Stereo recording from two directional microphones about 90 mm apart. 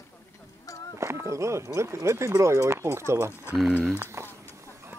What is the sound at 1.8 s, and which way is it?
Speech, 30° right (ahead or behind).